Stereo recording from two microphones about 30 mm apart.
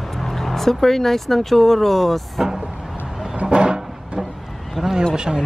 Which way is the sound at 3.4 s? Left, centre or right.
Right.